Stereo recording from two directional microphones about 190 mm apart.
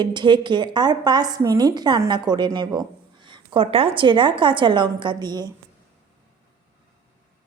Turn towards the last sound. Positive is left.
turn(degrees=-20)  # may be behind; listen again after turning